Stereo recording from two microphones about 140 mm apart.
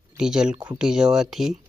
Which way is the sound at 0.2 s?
5° right (ahead or behind).